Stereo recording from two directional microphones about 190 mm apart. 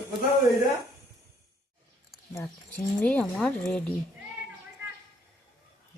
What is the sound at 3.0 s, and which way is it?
Speech, 5° left (ahead or behind).